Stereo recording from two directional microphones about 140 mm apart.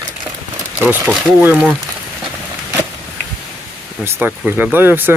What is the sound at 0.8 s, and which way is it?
Speech, 10° right (ahead or behind).